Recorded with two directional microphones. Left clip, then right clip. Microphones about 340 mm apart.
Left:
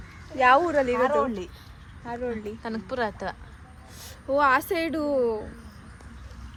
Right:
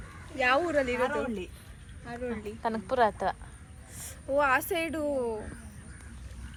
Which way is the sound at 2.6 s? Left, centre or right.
Centre.